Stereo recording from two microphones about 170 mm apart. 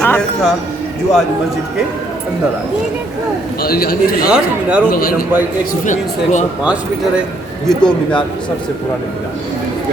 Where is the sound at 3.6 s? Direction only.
65° left (ahead or behind).